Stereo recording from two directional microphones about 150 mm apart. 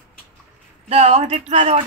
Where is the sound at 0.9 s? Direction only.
45° right (ahead or behind).